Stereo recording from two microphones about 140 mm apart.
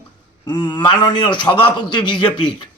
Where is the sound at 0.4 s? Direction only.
30° left (ahead or behind).